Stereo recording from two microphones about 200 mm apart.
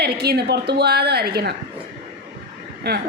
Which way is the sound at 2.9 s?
55° right (ahead or behind).